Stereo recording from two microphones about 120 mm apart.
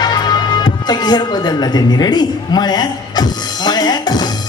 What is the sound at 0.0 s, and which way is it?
Music, 35° left (ahead or behind).